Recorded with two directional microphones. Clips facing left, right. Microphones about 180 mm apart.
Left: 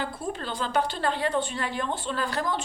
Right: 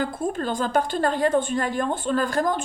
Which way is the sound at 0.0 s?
50° right (ahead or behind).